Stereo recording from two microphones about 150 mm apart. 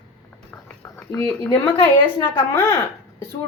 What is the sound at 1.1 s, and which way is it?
Speech, 20° left (ahead or behind).